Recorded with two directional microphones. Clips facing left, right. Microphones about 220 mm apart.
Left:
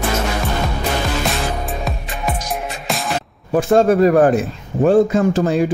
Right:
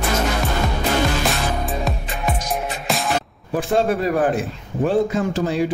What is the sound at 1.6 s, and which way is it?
Music, centre (ahead or behind).